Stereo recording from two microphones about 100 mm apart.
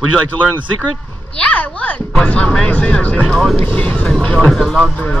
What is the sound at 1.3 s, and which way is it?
Speech, 10° left (ahead or behind).